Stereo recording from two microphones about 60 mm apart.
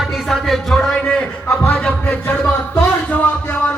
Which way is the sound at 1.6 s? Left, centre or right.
Left.